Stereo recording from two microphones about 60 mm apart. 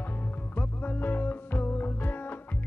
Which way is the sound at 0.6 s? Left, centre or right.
Left.